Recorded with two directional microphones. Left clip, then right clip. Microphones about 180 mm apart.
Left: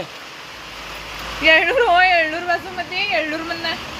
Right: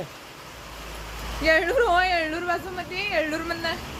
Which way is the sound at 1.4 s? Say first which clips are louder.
Left 6 dB; 30° right (ahead or behind).